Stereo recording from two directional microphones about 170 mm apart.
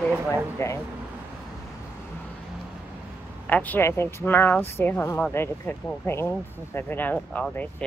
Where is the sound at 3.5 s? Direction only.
10° left (ahead or behind).